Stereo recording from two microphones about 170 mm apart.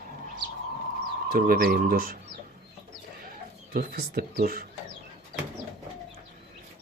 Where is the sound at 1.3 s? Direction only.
60° right (ahead or behind).